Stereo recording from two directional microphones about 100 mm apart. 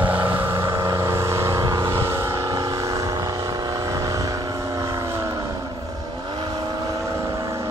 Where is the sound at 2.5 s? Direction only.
40° right (ahead or behind).